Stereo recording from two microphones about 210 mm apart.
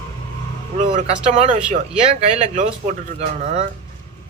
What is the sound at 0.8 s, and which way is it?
Speech, 30° right (ahead or behind).